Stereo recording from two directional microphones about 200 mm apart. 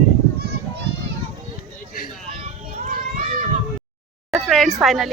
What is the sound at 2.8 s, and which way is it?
Children playing, 40° right (ahead or behind).